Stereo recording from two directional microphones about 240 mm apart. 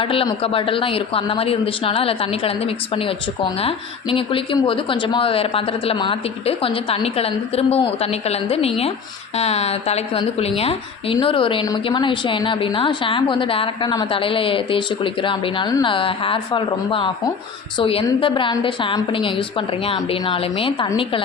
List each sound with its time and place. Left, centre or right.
0.0 s a woman's voice: left